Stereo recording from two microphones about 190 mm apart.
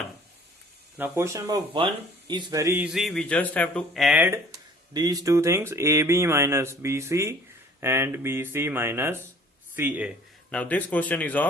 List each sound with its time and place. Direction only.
0.9 s speech: 10° right (ahead or behind)
4.9 s speech: 20° right (ahead or behind)
10.5 s speech: 5° left (ahead or behind)